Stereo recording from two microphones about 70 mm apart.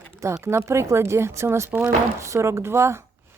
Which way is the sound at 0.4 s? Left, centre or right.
Right.